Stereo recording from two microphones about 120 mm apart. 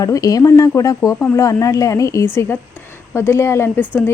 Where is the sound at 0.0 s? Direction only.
30° left (ahead or behind).